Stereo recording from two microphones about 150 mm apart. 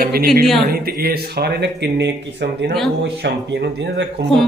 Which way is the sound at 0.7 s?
85° right.